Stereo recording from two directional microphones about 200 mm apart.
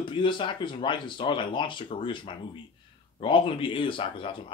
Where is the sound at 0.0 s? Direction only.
25° left (ahead or behind).